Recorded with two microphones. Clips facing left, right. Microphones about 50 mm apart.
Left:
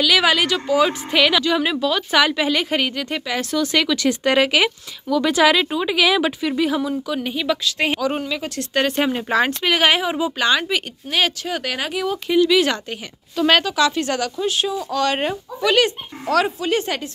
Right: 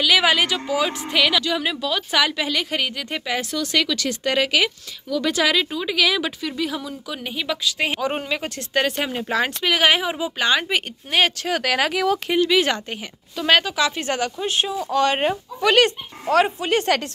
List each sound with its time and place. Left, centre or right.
0.0 s speech: centre
0.7 s a woman's voice: centre
3.9 s speech: left
5.1 s a woman's voice: centre
7.1 s speech: centre
8.0 s speech: right
8.9 s speech: centre
10.4 s speech: centre
11.1 s speech: right
11.4 s speech: right
12.4 s speech: right
13.4 s speech: centre
13.7 s speech: centre; by 16.9 s right